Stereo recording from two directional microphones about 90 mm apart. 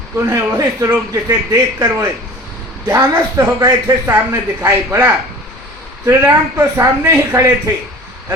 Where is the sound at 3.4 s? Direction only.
40° right (ahead or behind).